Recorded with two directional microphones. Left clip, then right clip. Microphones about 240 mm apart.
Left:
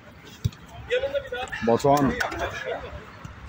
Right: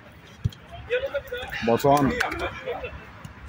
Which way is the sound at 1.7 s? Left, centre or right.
Centre.